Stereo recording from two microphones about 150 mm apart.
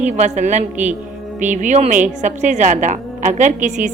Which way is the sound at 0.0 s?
50° right (ahead or behind).